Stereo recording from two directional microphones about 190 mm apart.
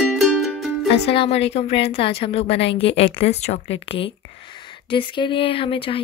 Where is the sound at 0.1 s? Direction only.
Centre (ahead or behind).